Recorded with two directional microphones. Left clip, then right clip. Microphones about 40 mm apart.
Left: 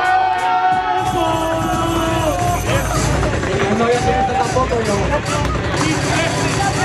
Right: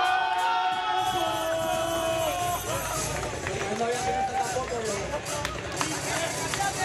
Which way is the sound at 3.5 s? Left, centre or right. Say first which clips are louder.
Left 12 dB; left.